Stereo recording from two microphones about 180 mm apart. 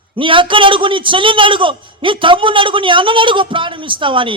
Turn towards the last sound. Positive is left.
turn(degrees=-30)  # may be behind; listen again after turning